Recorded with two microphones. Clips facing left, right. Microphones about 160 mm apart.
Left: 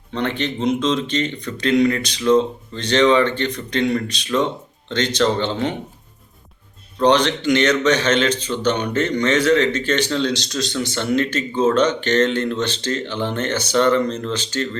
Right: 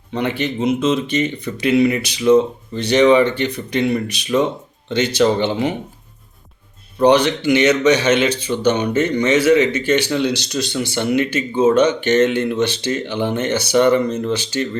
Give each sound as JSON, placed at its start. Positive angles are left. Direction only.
{"t": 0.1, "sound": "speech", "side_deg": -10}
{"t": 7.0, "sound": "speech", "side_deg": -10}